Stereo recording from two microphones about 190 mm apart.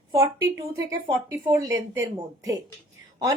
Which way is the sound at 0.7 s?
15° right (ahead or behind).